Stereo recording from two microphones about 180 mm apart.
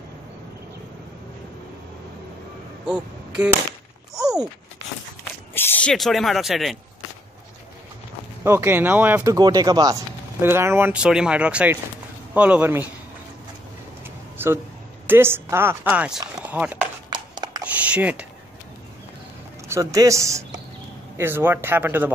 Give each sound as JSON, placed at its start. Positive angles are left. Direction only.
{"t": 5.5, "sound": "speech", "side_deg": 10}
{"t": 8.5, "sound": "speech", "side_deg": -10}
{"t": 14.0, "sound": "a sound", "side_deg": -15}
{"t": 15.0, "sound": "speech", "side_deg": -15}
{"t": 17.1, "sound": "a sound", "side_deg": -25}
{"t": 17.7, "sound": "speech", "side_deg": -5}
{"t": 19.7, "sound": "speech", "side_deg": -20}